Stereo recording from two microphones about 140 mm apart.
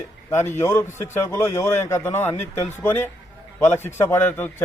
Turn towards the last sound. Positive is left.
turn(degrees=15)  # may be behind; listen again after turning